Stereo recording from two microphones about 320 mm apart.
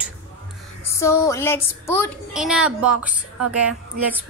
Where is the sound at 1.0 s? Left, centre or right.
Centre.